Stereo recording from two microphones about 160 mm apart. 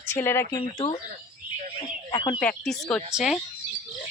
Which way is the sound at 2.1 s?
25° left (ahead or behind).